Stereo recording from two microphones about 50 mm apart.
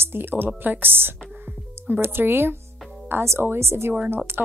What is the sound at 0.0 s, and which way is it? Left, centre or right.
Speech, right.